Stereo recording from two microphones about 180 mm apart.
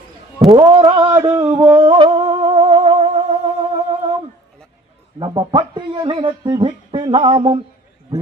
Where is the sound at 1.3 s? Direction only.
25° right (ahead or behind).